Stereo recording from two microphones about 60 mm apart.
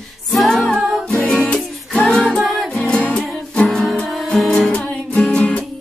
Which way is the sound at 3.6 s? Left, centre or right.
Centre.